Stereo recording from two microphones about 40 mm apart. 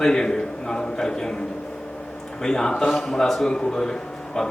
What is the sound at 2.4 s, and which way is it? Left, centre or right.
A man's voice, centre.